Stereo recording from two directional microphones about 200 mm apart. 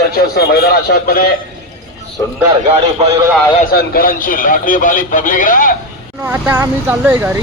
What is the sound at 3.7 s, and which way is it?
A man's voice, 50° left (ahead or behind).